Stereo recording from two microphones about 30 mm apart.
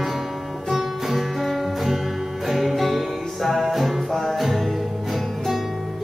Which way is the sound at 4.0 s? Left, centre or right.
Centre.